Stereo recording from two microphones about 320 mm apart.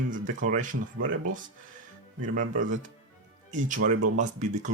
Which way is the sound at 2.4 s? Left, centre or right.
Right.